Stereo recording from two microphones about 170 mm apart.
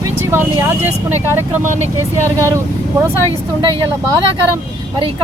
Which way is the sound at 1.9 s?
15° right (ahead or behind).